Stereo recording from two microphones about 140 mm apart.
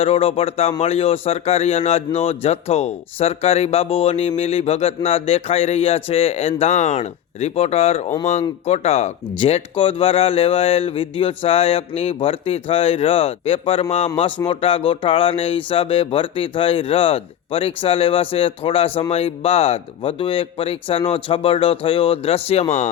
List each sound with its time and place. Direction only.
0.0 s a man's voice: 45° left (ahead or behind)